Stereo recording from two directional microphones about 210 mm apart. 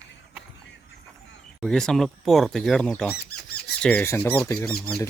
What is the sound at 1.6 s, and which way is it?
Speech, centre (ahead or behind).